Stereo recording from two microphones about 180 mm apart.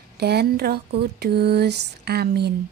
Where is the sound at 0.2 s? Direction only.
65° right (ahead or behind).